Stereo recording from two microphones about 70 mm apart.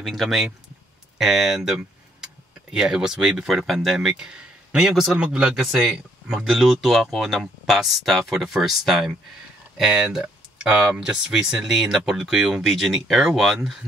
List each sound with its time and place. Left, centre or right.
0.0 s speech: centre
5.6 s speech: centre
9.8 s a sound: centre
10.7 s speech: right; by 13.7 s centre